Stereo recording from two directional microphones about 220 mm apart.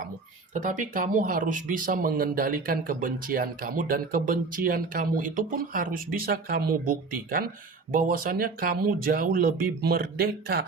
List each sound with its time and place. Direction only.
0.5 s speech: 35° right (ahead or behind)